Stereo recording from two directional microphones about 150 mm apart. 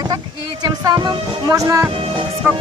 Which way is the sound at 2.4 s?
15° right (ahead or behind).